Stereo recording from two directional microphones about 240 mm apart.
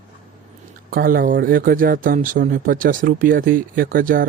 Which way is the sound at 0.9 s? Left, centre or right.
Right.